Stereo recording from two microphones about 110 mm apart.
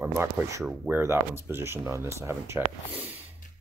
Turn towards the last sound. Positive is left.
turn(degrees=-20)  # may be behind; listen again after turning